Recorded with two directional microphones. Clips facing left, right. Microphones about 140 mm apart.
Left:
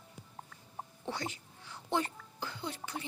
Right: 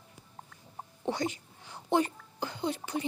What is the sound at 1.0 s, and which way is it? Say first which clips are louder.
Speech: right 8 dB; 20° right (ahead or behind).